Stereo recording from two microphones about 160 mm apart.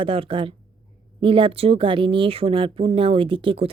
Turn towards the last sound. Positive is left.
turn(degrees=-35)  # may be behind; listen again after turning